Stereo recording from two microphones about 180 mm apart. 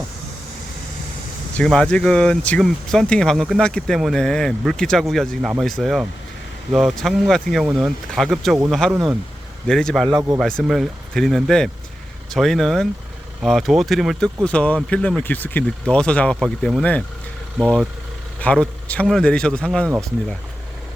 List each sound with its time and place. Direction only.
1.5 s speech: 5° left (ahead or behind)
10.1 s speech: 20° right (ahead or behind)
10.4 s speech: centre (ahead or behind)